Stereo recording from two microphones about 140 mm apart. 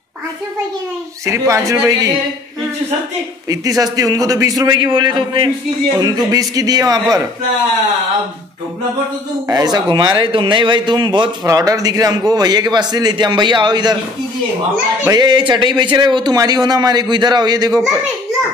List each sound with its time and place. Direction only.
1.2 s a man's voice: 20° right (ahead or behind)
3.4 s a man's voice: 25° right (ahead or behind)
9.5 s a man's voice: 30° right (ahead or behind)
15.0 s a man's voice: 30° right (ahead or behind)